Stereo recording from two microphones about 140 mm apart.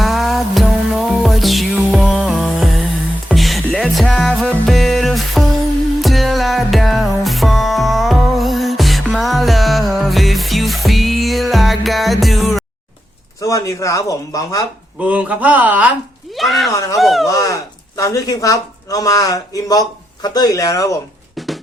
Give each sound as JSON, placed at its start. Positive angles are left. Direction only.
{"t": 0.0, "sound": "music", "side_deg": 0}
{"t": 13.4, "sound": "speech", "side_deg": 20}
{"t": 15.0, "sound": "speech", "side_deg": -10}
{"t": 16.3, "sound": "speech", "side_deg": 0}
{"t": 16.7, "sound": "speech", "side_deg": 25}
{"t": 17.0, "sound": "speech", "side_deg": 0}
{"t": 17.2, "sound": "speech", "side_deg": 25}
{"t": 21.3, "sound": "a sound", "side_deg": 0}